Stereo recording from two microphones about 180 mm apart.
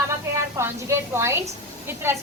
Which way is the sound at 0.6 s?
15° right (ahead or behind).